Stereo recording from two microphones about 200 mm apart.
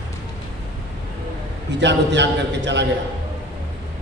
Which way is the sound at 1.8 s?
60° right (ahead or behind).